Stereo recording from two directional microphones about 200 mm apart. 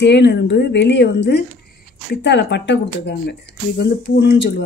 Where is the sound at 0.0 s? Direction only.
60° left (ahead or behind).